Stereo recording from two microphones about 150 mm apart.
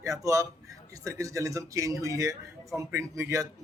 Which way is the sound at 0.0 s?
20° right (ahead or behind).